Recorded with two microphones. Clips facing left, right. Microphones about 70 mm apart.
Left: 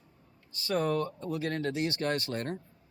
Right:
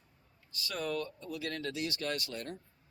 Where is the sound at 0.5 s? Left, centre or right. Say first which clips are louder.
Left 7 dB; left.